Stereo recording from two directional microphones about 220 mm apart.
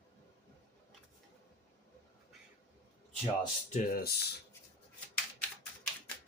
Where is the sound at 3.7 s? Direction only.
40° left (ahead or behind).